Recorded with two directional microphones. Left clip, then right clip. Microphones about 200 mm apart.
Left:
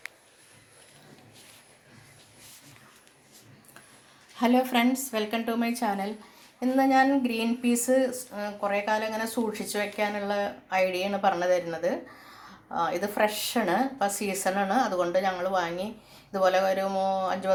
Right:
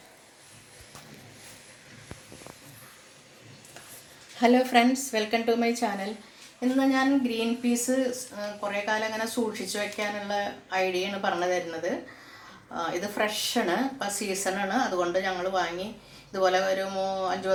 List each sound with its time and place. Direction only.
4.4 s a woman's voice: 35° left (ahead or behind)